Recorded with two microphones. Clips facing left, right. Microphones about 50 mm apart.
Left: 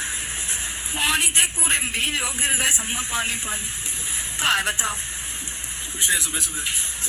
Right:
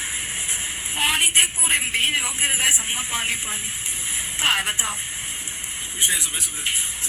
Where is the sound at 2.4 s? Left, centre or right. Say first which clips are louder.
Right 1 dB; right.